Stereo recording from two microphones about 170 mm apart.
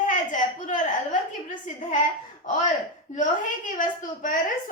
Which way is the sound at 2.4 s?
45° left (ahead or behind).